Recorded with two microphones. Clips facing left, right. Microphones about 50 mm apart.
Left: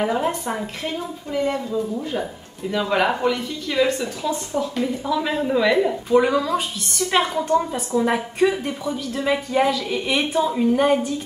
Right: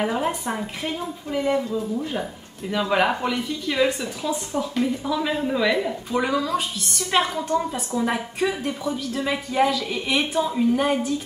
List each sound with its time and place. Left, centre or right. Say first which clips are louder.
0.0 s speech: left 2 dB; centre